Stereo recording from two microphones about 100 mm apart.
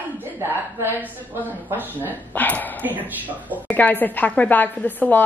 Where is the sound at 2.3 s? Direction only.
15° left (ahead or behind).